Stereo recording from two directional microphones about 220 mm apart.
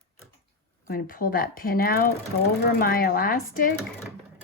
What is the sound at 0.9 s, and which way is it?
Speech, 40° left (ahead or behind).